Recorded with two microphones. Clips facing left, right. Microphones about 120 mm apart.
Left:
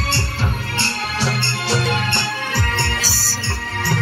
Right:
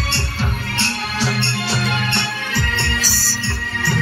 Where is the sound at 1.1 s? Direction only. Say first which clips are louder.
Right 2 dB; 65° left (ahead or behind).